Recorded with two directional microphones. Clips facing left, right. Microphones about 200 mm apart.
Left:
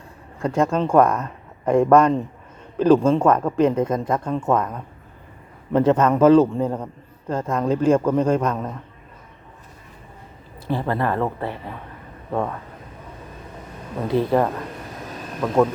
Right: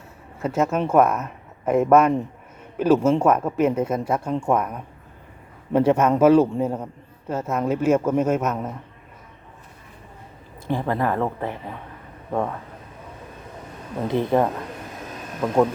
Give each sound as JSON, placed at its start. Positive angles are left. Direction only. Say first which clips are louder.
{"t": 0.3, "sound": "speech", "louder": "left 2 dB", "side_deg": -5}
{"t": 10.7, "sound": "speech", "louder": "even", "side_deg": -15}
{"t": 14.1, "sound": "speech", "louder": "left 1 dB", "side_deg": -20}